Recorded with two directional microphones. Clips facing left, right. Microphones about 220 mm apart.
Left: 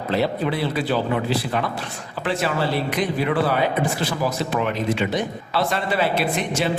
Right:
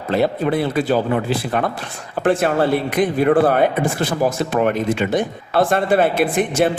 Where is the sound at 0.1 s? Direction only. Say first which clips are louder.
Right 5 dB; 50° right (ahead or behind).